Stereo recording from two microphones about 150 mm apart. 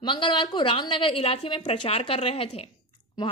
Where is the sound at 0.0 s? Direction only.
35° left (ahead or behind).